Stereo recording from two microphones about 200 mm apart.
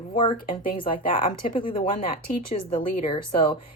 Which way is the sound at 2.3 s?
45° left (ahead or behind).